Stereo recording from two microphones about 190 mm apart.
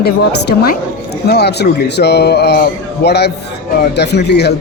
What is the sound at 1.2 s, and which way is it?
A woman's voice, 60° left (ahead or behind).